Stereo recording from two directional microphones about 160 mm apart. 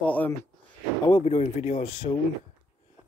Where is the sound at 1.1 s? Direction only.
35° left (ahead or behind).